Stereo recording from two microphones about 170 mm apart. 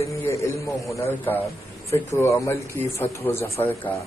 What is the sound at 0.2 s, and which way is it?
A man's voice, 15° left (ahead or behind).